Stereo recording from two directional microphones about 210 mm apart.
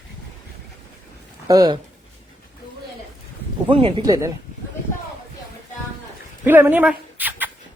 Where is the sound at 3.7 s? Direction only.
25° right (ahead or behind).